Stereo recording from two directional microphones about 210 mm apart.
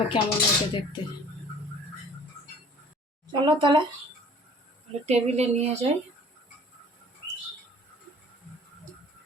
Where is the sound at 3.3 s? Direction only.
20° right (ahead or behind).